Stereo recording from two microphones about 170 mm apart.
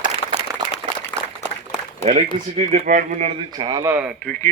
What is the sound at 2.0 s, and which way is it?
A man's voice, 40° right (ahead or behind).